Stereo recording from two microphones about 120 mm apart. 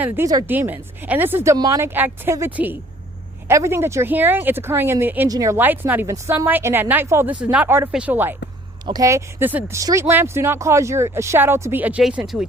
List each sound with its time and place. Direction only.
0.4 s speech: 15° right (ahead or behind)
1.5 s speech: 30° right (ahead or behind)
1.8 s speech: 15° right (ahead or behind)
3.5 s speech: 20° right (ahead or behind)
5.3 s speech: 30° right (ahead or behind)
5.5 s speech: 15° right (ahead or behind)
8.9 s speech: 25° right (ahead or behind)
12.0 s speech: 5° right (ahead or behind)